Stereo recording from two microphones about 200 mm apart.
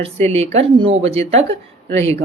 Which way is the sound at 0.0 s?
30° right (ahead or behind).